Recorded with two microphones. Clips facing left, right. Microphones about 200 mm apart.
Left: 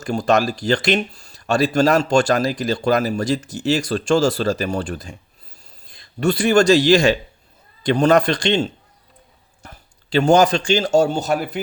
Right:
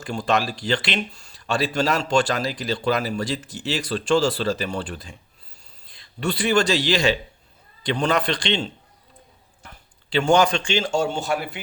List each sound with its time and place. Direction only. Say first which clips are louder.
0.0 s speech: left 5 dB; 40° left (ahead or behind)